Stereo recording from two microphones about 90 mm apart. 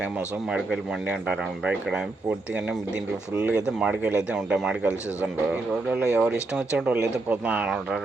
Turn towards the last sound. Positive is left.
turn(degrees=-15)  # may be behind; listen again after turning